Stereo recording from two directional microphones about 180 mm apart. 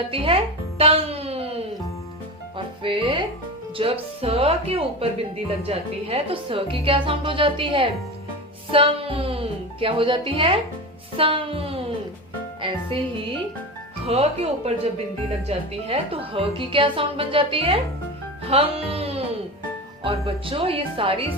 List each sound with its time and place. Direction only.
0.1 s speech: 30° right (ahead or behind)
2.8 s a woman's voice: 30° right (ahead or behind)
14.1 s a woman's voice: 35° right (ahead or behind)